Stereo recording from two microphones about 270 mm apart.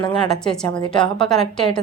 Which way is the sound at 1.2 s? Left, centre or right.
Centre.